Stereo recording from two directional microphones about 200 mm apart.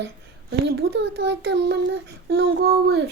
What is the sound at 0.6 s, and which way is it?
Child singing, 60° right (ahead or behind).